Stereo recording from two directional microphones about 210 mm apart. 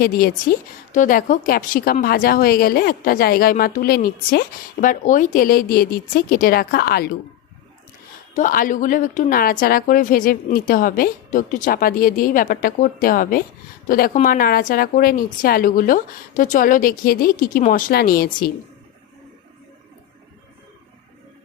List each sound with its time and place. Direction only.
0.0 s a woman's voice: 45° left (ahead or behind)
8.4 s a woman's voice: 40° left (ahead or behind)